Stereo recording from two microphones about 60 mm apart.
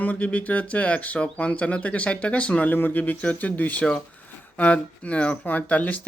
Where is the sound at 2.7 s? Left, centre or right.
Left.